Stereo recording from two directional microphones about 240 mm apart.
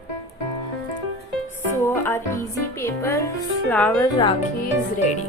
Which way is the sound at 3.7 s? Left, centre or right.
Centre.